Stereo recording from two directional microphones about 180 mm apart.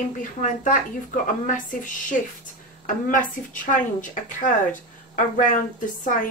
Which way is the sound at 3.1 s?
45° left (ahead or behind).